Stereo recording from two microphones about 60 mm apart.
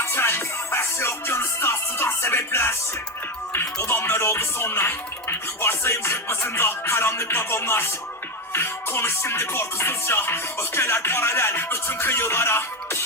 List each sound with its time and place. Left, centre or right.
0.0 s music: left
3.8 s music: left